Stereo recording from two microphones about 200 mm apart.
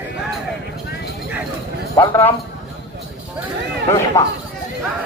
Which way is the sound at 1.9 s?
15° left (ahead or behind).